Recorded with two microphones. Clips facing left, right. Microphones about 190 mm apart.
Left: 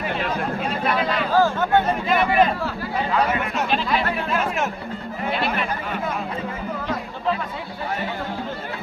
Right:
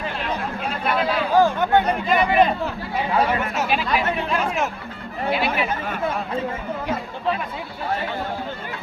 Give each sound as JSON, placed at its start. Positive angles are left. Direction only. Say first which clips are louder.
{"t": 0.6, "sound": "chatter", "louder": "right 2 dB", "side_deg": -5}
{"t": 1.3, "sound": "speech", "louder": "right 1 dB", "side_deg": -15}
{"t": 2.0, "sound": "speech", "louder": "right 1 dB", "side_deg": 0}
{"t": 3.2, "sound": "chatter", "louder": "right 1 dB", "side_deg": 0}
{"t": 5.3, "sound": "speech", "louder": "right 2 dB", "side_deg": 0}